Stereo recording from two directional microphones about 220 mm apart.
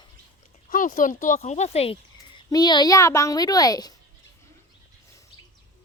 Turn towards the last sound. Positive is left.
turn(degrees=15)  # may be behind; listen again after turning